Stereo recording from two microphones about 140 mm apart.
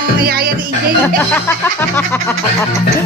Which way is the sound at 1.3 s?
15° left (ahead or behind).